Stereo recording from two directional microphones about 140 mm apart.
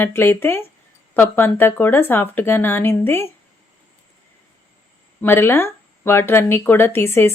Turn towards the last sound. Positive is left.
turn(degrees=15)  # may be behind; listen again after turning